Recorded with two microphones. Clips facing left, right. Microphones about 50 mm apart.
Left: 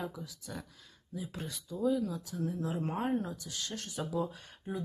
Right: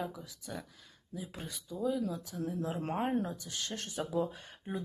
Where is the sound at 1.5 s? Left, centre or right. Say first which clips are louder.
Left 3 dB; centre.